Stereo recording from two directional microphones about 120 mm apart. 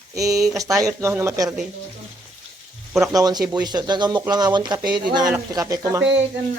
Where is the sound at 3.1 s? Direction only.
35° right (ahead or behind).